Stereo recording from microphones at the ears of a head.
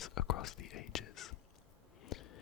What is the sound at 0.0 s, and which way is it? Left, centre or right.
Whispering, left.